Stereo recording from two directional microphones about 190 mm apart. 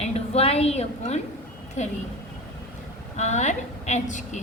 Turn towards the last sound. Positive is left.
turn(degrees=40)  # may be behind; listen again after turning